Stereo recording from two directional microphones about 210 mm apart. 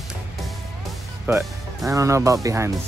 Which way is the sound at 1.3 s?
15° right (ahead or behind).